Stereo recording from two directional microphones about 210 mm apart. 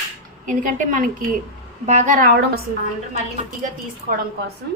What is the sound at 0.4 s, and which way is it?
A woman's voice, 40° right (ahead or behind).